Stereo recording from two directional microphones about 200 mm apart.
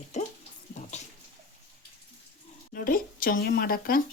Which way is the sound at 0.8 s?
35° left (ahead or behind).